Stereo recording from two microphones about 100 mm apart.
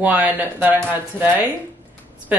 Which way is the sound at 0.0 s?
15° right (ahead or behind).